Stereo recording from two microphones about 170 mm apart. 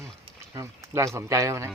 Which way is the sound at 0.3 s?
20° right (ahead or behind).